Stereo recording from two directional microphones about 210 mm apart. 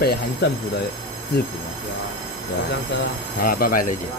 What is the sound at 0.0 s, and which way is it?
Speech, 50° left (ahead or behind).